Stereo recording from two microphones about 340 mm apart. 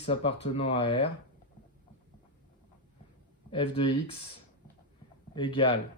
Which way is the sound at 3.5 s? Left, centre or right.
Centre.